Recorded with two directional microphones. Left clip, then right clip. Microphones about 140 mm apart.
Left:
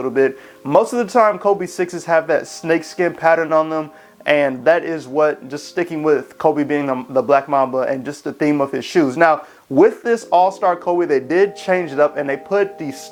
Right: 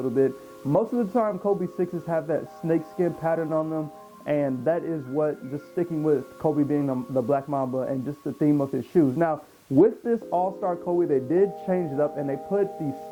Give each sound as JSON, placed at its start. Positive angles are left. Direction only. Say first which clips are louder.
{"t": 0.0, "sound": "speech", "louder": "left 7 dB", "side_deg": 25}